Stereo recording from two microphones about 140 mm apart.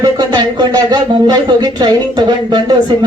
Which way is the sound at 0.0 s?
30° right (ahead or behind).